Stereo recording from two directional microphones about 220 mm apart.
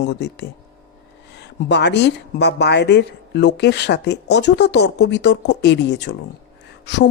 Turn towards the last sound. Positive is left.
turn(degrees=50)  # may be behind; listen again after turning